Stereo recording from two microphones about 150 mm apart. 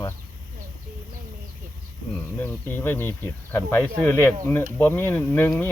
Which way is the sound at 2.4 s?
15° left (ahead or behind).